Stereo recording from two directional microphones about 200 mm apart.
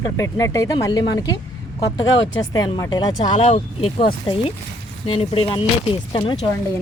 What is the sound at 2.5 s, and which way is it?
Speech, 20° left (ahead or behind).